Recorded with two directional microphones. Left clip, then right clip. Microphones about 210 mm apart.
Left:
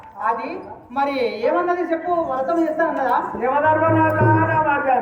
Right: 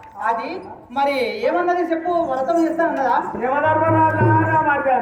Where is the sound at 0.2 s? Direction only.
20° right (ahead or behind).